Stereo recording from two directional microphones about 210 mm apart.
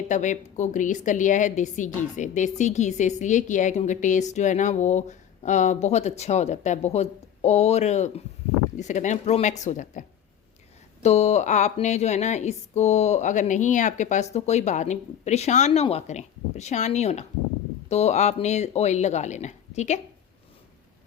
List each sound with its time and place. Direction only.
0.1 s a woman's voice: 35° left (ahead or behind)
11.0 s a woman's voice: 30° left (ahead or behind)